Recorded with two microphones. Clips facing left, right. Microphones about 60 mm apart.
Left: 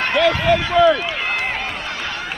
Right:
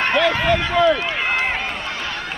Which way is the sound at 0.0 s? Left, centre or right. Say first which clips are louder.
Left 1 dB; right.